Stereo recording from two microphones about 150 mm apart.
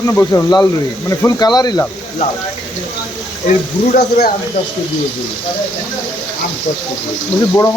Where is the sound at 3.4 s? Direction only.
60° left (ahead or behind).